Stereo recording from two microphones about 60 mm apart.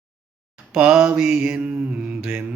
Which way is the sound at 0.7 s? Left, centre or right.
Centre.